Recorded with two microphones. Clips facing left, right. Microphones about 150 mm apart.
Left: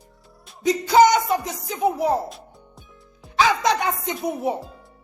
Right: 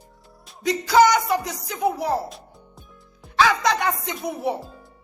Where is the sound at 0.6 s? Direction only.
20° left (ahead or behind).